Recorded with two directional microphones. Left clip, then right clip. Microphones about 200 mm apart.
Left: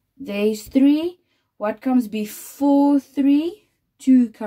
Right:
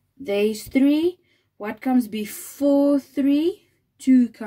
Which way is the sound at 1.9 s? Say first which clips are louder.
Left 1 dB; 15° left (ahead or behind).